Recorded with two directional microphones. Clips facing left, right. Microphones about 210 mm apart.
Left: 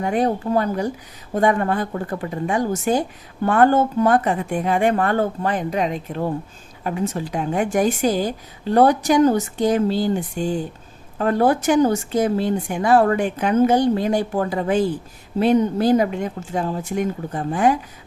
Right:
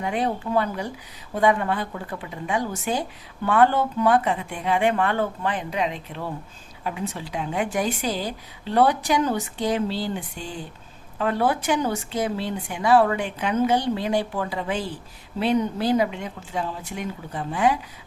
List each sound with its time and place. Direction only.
0.0 s a woman's voice: 45° left (ahead or behind)